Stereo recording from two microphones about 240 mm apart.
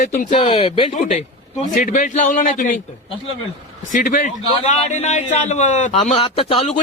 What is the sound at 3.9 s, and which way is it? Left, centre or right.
Speech, left.